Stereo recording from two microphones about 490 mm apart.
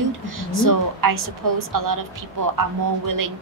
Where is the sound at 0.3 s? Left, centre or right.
Right.